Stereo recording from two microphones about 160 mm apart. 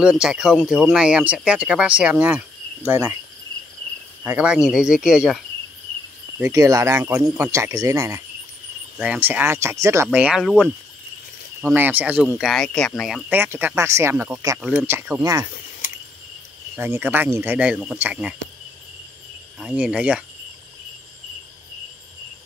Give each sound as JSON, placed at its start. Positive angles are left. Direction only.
{"t": 0.0, "sound": "speech", "side_deg": -5}
{"t": 4.2, "sound": "speech", "side_deg": -10}
{"t": 6.4, "sound": "speech", "side_deg": -20}
{"t": 9.0, "sound": "speech", "side_deg": -10}
{"t": 11.6, "sound": "speech", "side_deg": -10}
{"t": 13.3, "sound": "speech", "side_deg": -10}
{"t": 14.9, "sound": "speech", "side_deg": -15}
{"t": 16.7, "sound": "speech", "side_deg": -15}
{"t": 19.6, "sound": "speech", "side_deg": -5}